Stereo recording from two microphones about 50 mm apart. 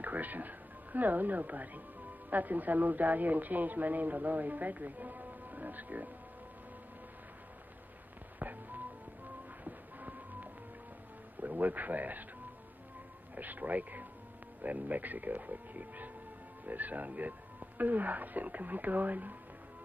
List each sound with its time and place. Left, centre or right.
0.0 s speech: right
8.4 s music: right
9.7 s a sound: right
11.3 s speech: right
13.3 s speech: right